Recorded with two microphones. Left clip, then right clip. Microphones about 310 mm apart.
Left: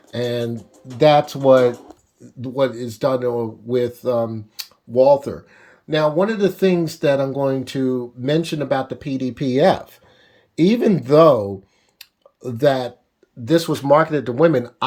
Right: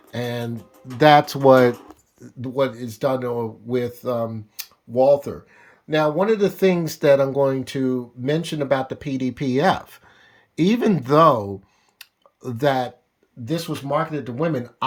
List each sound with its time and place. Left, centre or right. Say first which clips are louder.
0.1 s speech: left 5 dB; centre
0.9 s speech: even; centre
2.4 s speech: left 2 dB; centre
11.9 s a sound: left 2 dB; centre
13.4 s speech: left 9 dB; centre